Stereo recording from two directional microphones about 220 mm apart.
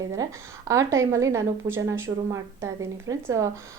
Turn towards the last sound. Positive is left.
turn(degrees=-15)  # may be behind; listen again after turning